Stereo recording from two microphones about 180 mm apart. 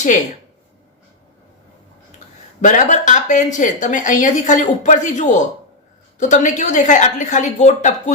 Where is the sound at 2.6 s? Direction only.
45° left (ahead or behind).